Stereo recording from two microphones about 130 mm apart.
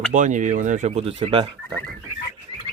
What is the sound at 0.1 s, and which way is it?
Speech, 75° right (ahead or behind).